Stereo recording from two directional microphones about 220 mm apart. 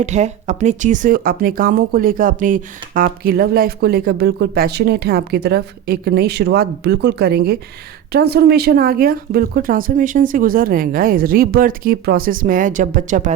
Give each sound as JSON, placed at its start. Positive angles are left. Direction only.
{"t": 0.0, "sound": "speech", "side_deg": -30}